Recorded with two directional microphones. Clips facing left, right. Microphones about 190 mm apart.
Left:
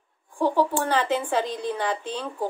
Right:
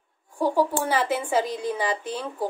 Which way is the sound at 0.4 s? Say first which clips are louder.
Even; 10° right (ahead or behind).